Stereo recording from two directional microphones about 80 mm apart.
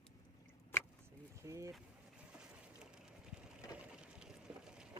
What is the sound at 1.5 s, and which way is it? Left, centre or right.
Speech, right.